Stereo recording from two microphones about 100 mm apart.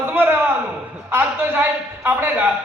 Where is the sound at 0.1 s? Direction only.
20° right (ahead or behind).